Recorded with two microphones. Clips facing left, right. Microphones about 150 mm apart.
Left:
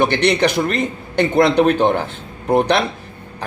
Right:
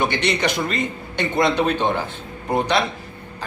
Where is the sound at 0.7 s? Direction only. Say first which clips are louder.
Left 4 dB; 60° left (ahead or behind).